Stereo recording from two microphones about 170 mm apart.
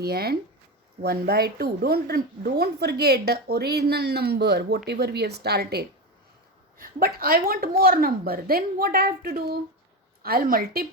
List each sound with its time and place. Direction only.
0.0 s a woman's voice: 65° right (ahead or behind)